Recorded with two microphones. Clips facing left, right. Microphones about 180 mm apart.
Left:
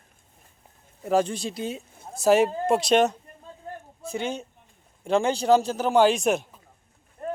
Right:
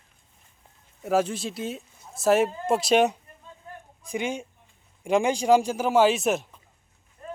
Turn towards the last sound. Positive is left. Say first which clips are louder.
# left 7 dB
turn(degrees=55)  # may be behind; listen again after turning